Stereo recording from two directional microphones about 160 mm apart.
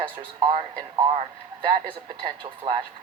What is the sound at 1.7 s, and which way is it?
Speech, 30° right (ahead or behind).